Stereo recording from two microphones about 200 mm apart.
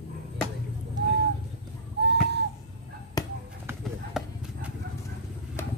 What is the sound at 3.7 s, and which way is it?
Clip-clop, 5° right (ahead or behind).